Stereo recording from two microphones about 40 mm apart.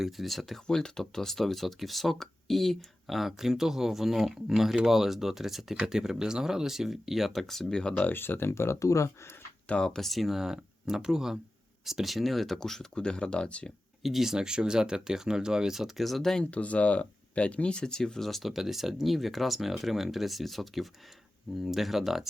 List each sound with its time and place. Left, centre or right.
0.0 s speech: centre
0.7 s speech: centre
5.7 s speech: centre
7.7 s speech: centre
8.1 s speech: left
10.0 s speech: centre
10.2 s speech: centre
12.5 s speech: centre
14.0 s speech: centre
14.4 s speech: centre
16.0 s speech: centre
16.4 s speech: left; by 22.3 s centre